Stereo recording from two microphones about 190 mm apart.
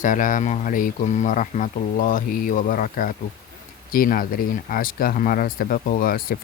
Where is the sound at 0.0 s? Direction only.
45° left (ahead or behind).